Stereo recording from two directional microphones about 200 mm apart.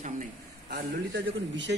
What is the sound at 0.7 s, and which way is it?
A man's voice, 60° right (ahead or behind).